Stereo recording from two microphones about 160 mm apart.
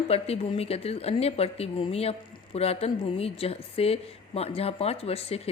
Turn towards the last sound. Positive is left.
turn(degrees=40)  # may be behind; listen again after turning